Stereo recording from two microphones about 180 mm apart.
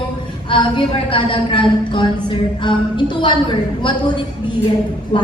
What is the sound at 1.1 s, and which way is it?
Speech, 30° left (ahead or behind).